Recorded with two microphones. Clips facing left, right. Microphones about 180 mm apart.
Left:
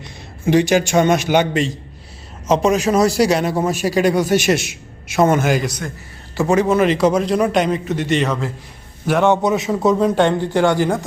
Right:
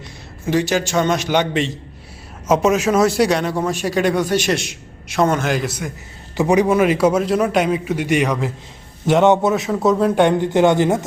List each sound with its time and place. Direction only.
0.4 s a man's voice: 15° left (ahead or behind); by 9.4 s 20° right (ahead or behind)
9.4 s a man's voice: centre (ahead or behind)
10.2 s speech: 15° right (ahead or behind)